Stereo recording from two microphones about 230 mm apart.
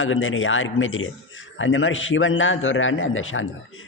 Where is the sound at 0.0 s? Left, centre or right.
Left.